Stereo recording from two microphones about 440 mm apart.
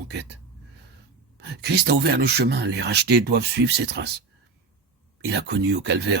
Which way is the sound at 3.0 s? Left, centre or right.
Right.